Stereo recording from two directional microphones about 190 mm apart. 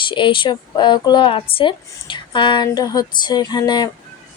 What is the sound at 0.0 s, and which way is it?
Speech, 25° left (ahead or behind).